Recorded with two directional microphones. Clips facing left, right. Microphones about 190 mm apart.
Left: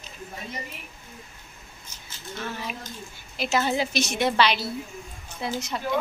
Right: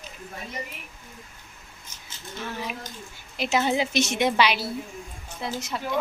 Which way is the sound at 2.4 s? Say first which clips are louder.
Right 1 dB; 15° right (ahead or behind).